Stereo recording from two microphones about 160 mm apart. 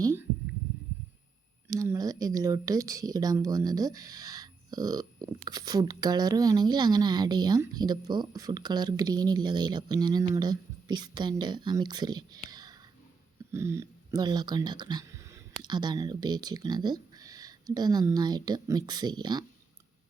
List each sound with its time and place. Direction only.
0.0 s heart murmur: 20° right (ahead or behind)
1.6 s a woman's voice: 20° right (ahead or behind)
12.5 s whispering: 25° right (ahead or behind)
13.5 s speech: 15° right (ahead or behind)